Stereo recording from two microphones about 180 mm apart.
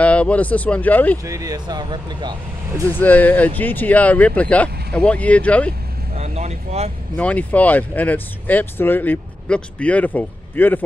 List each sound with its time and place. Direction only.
0.0 s speech: 5° left (ahead or behind)
1.2 s speech: 20° right (ahead or behind)
2.9 s speech: 10° left (ahead or behind)
6.1 s speech: 35° right (ahead or behind)
7.2 s speech: 10° left (ahead or behind)